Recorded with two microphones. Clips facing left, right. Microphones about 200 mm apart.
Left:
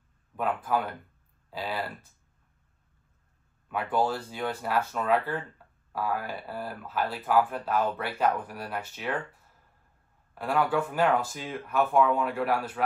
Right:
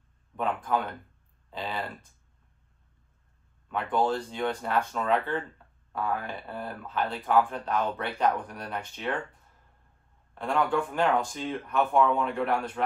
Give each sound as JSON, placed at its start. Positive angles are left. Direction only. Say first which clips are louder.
{"t": 0.4, "sound": "speech", "louder": "even", "side_deg": 5}
{"t": 3.6, "sound": "speech", "louder": "even", "side_deg": 5}
{"t": 10.3, "sound": "speech", "louder": "even", "side_deg": 5}